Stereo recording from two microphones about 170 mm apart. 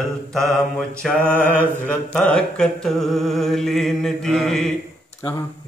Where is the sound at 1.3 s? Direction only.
10° left (ahead or behind).